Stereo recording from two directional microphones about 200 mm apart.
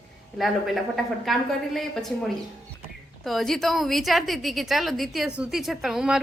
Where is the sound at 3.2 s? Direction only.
Centre (ahead or behind).